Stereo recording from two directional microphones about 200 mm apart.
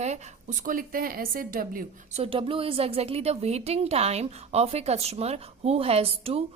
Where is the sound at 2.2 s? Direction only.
25° right (ahead or behind).